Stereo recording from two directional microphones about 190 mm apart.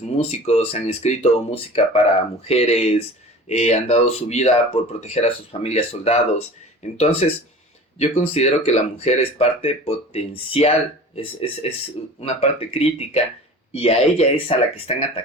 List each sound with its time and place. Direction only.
0.0 s speech: 35° left (ahead or behind)